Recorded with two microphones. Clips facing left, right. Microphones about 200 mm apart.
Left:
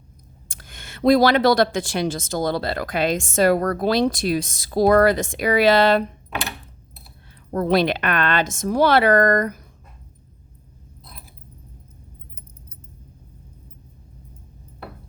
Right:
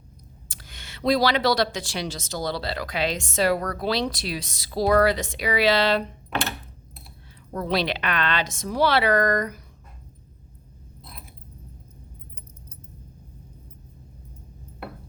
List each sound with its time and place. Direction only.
0.4 s speech: 50° left (ahead or behind)
7.5 s speech: 50° left (ahead or behind)